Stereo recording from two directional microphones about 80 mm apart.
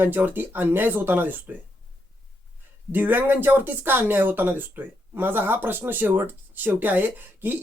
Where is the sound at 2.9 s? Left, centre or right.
Right.